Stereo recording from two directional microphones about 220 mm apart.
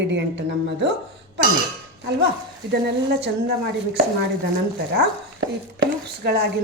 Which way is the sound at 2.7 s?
50° right (ahead or behind).